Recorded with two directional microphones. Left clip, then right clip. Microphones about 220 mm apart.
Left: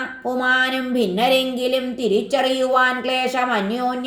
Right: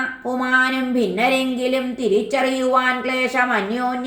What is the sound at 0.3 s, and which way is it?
Speech, 35° left (ahead or behind).